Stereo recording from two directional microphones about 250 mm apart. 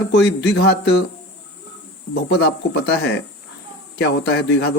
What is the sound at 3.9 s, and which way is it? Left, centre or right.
Speech, left.